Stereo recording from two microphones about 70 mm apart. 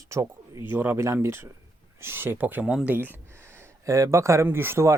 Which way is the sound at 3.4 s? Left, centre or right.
Right.